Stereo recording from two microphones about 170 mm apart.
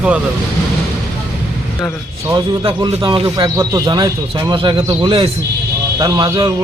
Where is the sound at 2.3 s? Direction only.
25° right (ahead or behind).